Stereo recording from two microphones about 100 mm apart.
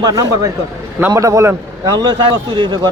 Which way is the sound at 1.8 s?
45° right (ahead or behind).